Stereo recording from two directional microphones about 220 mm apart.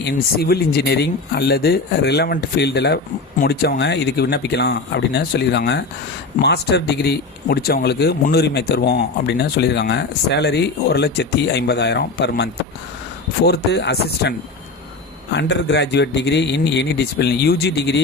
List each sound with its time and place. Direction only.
0.0 s speech: 45° left (ahead or behind)